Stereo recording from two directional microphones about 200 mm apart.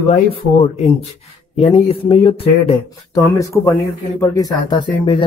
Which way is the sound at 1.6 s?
30° left (ahead or behind).